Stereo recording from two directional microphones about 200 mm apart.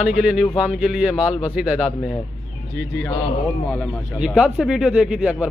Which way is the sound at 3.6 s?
5° left (ahead or behind).